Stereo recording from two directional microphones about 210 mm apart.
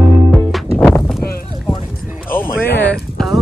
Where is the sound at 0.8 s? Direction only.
10° left (ahead or behind).